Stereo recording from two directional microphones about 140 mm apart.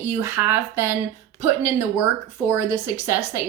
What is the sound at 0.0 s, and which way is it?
Speech, 15° right (ahead or behind).